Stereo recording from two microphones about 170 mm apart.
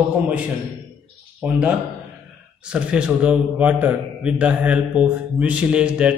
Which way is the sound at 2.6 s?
5° right (ahead or behind).